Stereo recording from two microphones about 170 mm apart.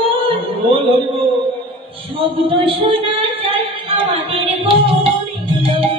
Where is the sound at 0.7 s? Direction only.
30° right (ahead or behind).